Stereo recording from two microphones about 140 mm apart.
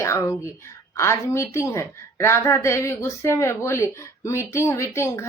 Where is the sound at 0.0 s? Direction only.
20° left (ahead or behind).